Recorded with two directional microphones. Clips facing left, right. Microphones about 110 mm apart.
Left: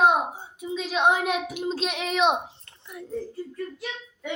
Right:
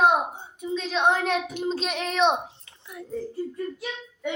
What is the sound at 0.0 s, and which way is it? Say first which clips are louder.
A woman's voice: even; centre (ahead or behind).